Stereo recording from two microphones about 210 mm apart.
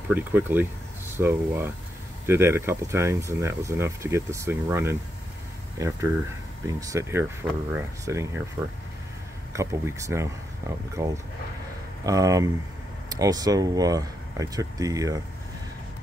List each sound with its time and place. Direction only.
0.1 s speech: 10° right (ahead or behind)
9.5 s speech: 15° right (ahead or behind)